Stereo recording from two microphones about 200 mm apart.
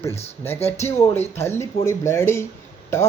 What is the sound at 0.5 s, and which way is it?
Speech, 30° left (ahead or behind).